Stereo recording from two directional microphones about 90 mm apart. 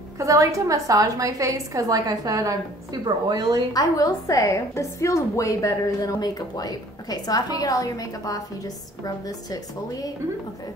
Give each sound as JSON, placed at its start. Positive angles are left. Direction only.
{"t": 0.2, "sound": "a woman's voice", "side_deg": -35}
{"t": 3.7, "sound": "a woman's voice", "side_deg": 40}